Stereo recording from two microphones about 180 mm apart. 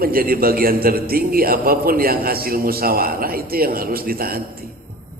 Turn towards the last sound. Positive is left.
turn(degrees=-55)  # may be behind; listen again after turning